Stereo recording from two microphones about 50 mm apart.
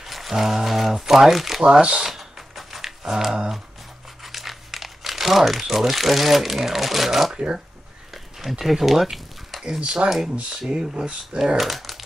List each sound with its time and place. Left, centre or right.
0.0 s speech: centre
1.6 s speech: centre
2.0 s a sound: centre
3.3 s speech: centre
8.1 s a sound: centre
9.8 s speech: centre
10.0 s speech: centre